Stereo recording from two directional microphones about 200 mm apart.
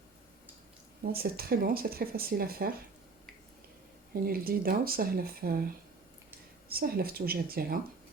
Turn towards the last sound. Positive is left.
turn(degrees=-50)  # may be behind; listen again after turning